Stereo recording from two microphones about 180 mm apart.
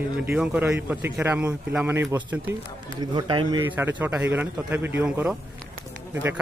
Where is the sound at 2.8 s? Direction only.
25° right (ahead or behind).